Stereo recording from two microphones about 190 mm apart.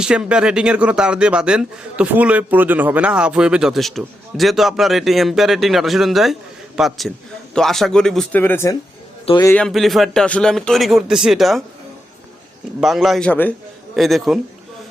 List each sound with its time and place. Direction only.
0.0 s speech: 5° right (ahead or behind); by 8.7 s 10° left (ahead or behind)
9.2 s a man's voice: 25° left (ahead or behind)
9.5 s speech: 5° left (ahead or behind)
12.8 s speech: centre (ahead or behind)